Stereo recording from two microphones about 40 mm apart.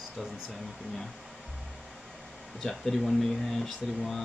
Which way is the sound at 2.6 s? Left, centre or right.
Centre.